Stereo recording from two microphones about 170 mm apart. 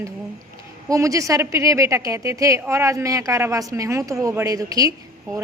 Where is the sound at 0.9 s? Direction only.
20° right (ahead or behind).